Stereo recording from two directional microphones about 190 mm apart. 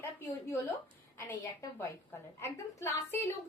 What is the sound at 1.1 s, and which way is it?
A woman's voice, 15° left (ahead or behind).